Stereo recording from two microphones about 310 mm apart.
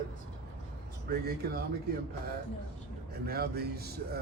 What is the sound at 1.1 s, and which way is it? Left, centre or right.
Speech, right.